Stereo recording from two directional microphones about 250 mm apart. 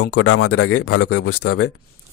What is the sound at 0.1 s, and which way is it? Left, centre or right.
Speech, left.